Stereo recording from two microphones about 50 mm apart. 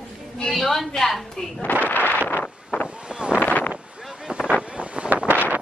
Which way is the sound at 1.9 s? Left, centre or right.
Left.